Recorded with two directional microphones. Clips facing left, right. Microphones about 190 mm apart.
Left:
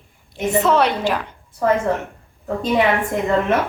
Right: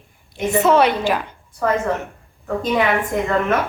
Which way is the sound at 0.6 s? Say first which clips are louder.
Right 2 dB; 5° right (ahead or behind).